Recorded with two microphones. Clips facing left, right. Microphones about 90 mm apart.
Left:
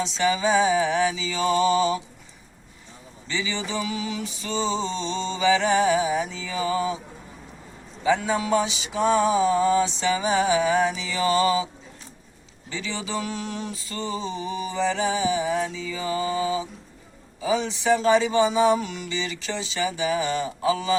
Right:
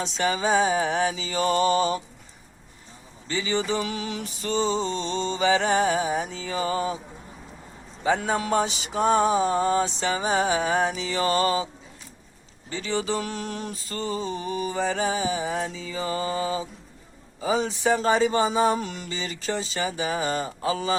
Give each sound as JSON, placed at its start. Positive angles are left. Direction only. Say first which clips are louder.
{"t": 0.0, "sound": "music", "louder": "left 2 dB", "side_deg": -45}
{"t": 3.2, "sound": "music", "louder": "right 3 dB", "side_deg": -45}
{"t": 8.0, "sound": "music", "louder": "left 1 dB", "side_deg": -45}
{"t": 12.7, "sound": "music", "louder": "right 3 dB", "side_deg": -45}
{"t": 14.3, "sound": "mantra", "louder": "right 1 dB", "side_deg": -50}
{"t": 17.4, "sound": "music", "louder": "even", "side_deg": -40}